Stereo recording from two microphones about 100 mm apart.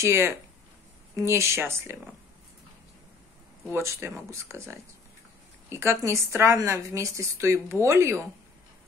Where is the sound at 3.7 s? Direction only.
25° right (ahead or behind).